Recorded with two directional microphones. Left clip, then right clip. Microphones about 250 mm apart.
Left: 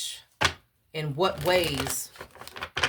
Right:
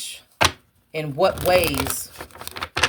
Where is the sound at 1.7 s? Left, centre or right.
Right.